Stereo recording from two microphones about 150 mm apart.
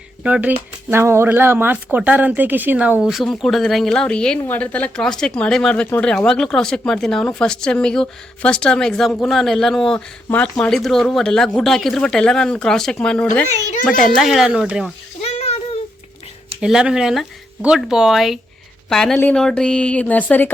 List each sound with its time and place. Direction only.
0.2 s speech: 5° right (ahead or behind)
15.2 s a sound: 45° left (ahead or behind)
16.6 s speech: 5° right (ahead or behind); by 20.5 s 10° left (ahead or behind)